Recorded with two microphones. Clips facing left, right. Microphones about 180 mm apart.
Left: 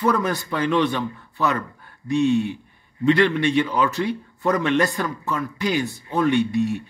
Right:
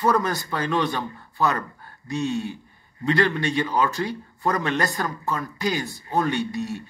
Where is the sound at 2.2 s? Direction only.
40° right (ahead or behind).